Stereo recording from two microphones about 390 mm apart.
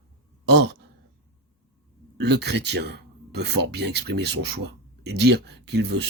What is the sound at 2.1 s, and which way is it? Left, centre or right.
Speech, right.